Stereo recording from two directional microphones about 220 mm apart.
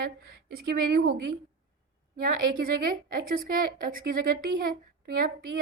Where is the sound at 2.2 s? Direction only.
45° right (ahead or behind).